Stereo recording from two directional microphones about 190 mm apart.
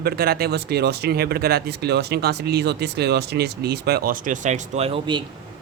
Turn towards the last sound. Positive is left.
turn(degrees=-25)  # may be behind; listen again after turning